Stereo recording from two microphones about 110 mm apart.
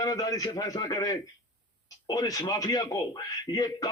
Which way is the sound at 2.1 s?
35° left (ahead or behind).